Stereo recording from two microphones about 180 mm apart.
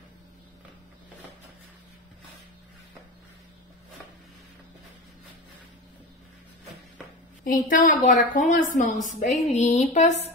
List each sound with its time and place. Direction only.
7.4 s a woman's voice: 50° left (ahead or behind)